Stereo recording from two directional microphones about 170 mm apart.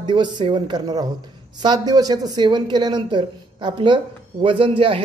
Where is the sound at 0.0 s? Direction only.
25° right (ahead or behind).